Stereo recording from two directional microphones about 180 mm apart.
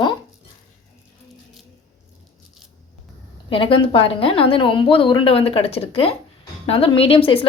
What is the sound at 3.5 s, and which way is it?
A woman's voice, 30° left (ahead or behind).